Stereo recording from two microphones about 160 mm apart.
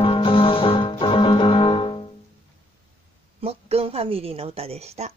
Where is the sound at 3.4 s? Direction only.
40° right (ahead or behind).